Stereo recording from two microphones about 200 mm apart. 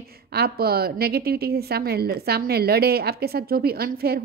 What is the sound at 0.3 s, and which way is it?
A woman's voice, 50° right (ahead or behind).